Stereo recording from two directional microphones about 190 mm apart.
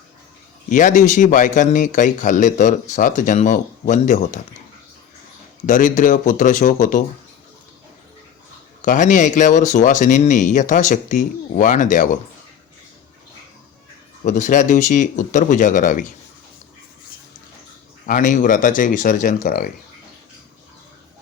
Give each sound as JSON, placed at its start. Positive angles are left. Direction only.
{"t": 0.7, "sound": "a man's voice", "side_deg": 40}
{"t": 5.6, "sound": "speech", "side_deg": 45}
{"t": 8.8, "sound": "a man's voice", "side_deg": 40}
{"t": 14.3, "sound": "a man's voice", "side_deg": 40}
{"t": 18.0, "sound": "speech", "side_deg": 45}